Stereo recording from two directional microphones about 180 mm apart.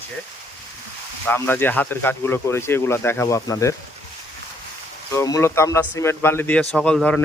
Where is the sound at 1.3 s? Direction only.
10° left (ahead or behind).